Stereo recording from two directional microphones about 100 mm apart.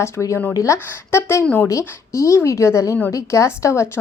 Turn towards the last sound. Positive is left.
turn(degrees=30)  # may be behind; listen again after turning